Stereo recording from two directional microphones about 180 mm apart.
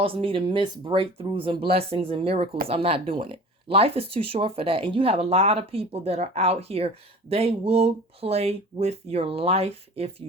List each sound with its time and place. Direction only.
0.0 s speech: 30° right (ahead or behind)